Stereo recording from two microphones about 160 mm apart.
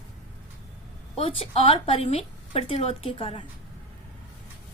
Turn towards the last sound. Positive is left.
turn(degrees=35)  # may be behind; listen again after turning